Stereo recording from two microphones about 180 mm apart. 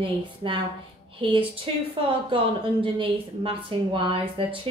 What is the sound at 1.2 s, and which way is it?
A woman's voice, 30° right (ahead or behind).